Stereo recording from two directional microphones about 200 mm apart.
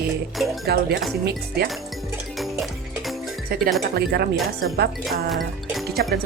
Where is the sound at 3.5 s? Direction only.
50° right (ahead or behind).